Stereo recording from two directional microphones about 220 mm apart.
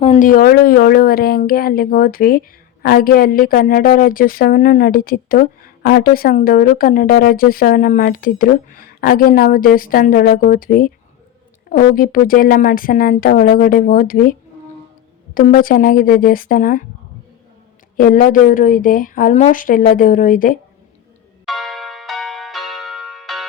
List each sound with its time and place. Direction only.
0.0 s a woman's voice: 30° left (ahead or behind)
15.4 s a woman's voice: 40° left (ahead or behind)
17.9 s a woman's voice: 40° left (ahead or behind)
21.4 s music: centre (ahead or behind)